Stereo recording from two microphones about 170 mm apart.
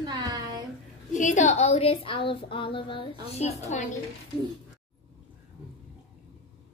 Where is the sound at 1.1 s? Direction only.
45° left (ahead or behind).